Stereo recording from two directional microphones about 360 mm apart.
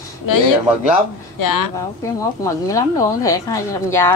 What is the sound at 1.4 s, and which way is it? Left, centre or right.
Speech, left.